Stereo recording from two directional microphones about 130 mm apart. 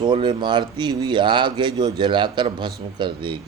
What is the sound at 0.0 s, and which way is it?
Speech, 35° right (ahead or behind).